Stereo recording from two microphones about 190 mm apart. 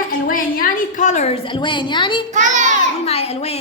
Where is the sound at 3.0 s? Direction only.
30° left (ahead or behind).